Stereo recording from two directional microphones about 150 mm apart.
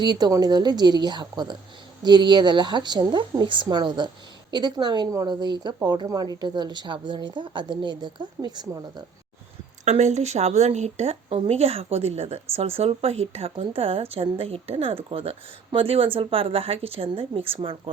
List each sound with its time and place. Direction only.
0.0 s a woman's voice: 30° right (ahead or behind)
9.8 s speech: 50° right (ahead or behind)